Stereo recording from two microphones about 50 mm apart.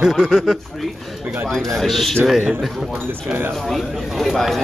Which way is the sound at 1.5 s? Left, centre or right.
Centre.